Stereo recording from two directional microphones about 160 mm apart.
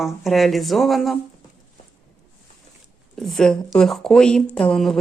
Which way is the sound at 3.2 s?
Centre (ahead or behind).